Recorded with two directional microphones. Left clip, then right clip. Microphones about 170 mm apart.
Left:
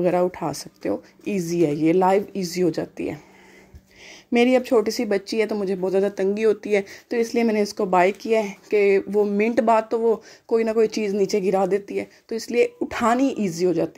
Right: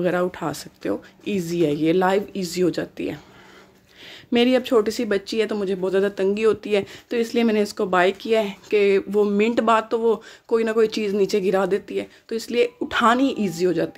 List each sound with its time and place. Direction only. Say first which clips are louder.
0.0 s speech: left 2 dB; 15° left (ahead or behind)
4.3 s speech: even; 15° left (ahead or behind)